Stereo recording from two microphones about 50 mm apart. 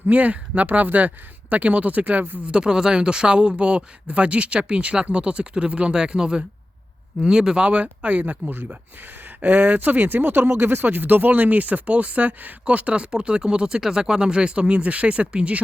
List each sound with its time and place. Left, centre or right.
0.1 s speech: right
2.4 s speech: centre